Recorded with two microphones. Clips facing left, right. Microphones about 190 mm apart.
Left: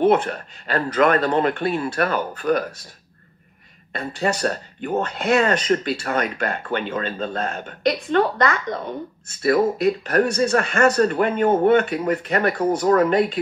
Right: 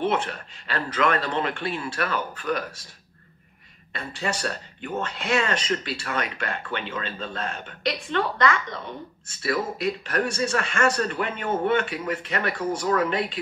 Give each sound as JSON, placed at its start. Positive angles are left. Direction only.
{"t": 0.0, "sound": "speech", "side_deg": 45}
{"t": 3.9, "sound": "speech", "side_deg": 40}